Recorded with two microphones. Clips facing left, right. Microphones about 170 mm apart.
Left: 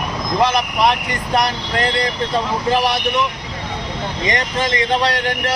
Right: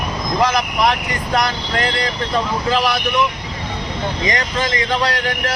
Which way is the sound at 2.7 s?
25° left (ahead or behind).